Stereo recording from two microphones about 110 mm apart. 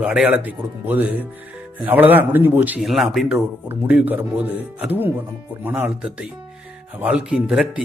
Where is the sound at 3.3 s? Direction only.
15° right (ahead or behind).